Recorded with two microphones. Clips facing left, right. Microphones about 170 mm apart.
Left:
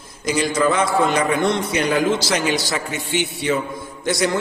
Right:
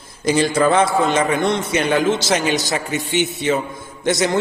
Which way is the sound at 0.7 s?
30° right (ahead or behind).